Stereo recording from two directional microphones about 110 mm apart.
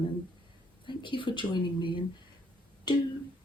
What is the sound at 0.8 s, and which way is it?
Speech, 45° left (ahead or behind).